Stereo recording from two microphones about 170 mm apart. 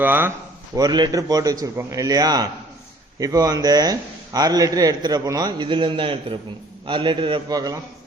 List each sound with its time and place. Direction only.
0.0 s speech: 10° right (ahead or behind)
0.8 s a man's voice: 25° right (ahead or behind)